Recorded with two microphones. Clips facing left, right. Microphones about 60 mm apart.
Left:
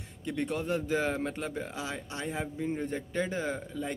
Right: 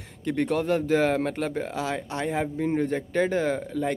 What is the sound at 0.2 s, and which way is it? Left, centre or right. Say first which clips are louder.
Speech: right 7 dB; right.